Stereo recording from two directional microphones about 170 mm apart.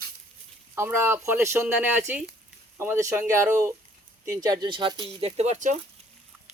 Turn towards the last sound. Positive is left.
turn(degrees=-45)  # may be behind; listen again after turning